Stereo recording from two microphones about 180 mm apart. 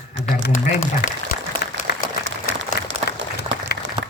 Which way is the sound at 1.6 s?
55° left (ahead or behind).